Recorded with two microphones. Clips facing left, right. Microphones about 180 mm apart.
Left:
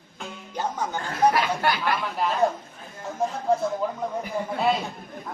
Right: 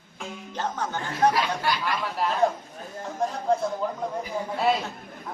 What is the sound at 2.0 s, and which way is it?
Speech, centre (ahead or behind).